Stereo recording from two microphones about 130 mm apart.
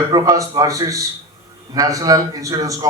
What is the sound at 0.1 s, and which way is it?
A man's voice, 30° right (ahead or behind).